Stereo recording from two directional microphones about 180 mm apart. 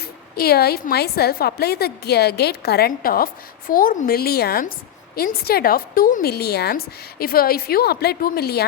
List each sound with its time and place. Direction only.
0.0 s a woman's voice: 60° left (ahead or behind)